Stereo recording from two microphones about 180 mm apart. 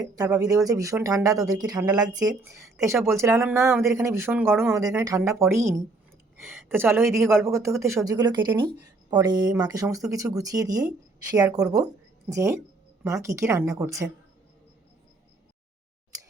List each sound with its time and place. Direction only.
0.0 s a woman's voice: 20° right (ahead or behind)